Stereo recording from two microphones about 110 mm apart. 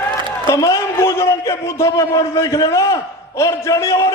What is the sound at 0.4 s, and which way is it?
A man's voice, 25° left (ahead or behind).